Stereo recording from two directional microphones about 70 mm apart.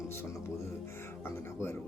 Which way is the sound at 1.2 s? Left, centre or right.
Left.